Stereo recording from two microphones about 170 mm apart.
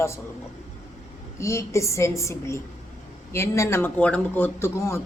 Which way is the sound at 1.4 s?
15° left (ahead or behind).